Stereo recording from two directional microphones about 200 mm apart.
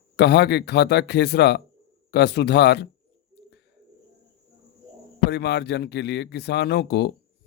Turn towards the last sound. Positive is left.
turn(degrees=55)  # may be behind; listen again after turning